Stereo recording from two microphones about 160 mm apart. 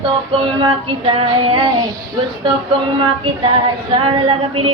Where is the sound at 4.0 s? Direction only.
35° right (ahead or behind).